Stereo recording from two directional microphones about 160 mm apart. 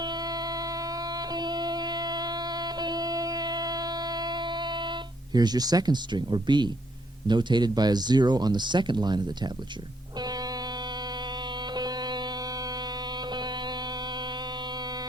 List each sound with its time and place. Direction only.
0.0 s music: 25° right (ahead or behind)
5.3 s speech: 25° right (ahead or behind)
11.7 s music: 25° right (ahead or behind)